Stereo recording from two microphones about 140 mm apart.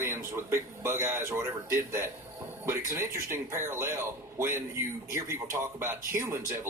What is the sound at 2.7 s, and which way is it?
Speech, 20° right (ahead or behind).